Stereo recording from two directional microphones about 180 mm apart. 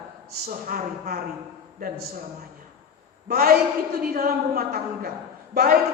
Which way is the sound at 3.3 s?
55° right (ahead or behind).